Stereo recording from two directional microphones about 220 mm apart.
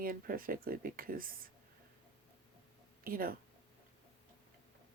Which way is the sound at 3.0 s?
40° right (ahead or behind).